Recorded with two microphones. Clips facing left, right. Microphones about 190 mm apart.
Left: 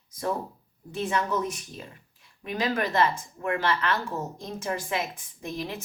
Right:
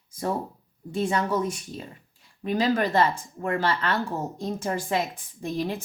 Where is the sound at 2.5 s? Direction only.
30° right (ahead or behind).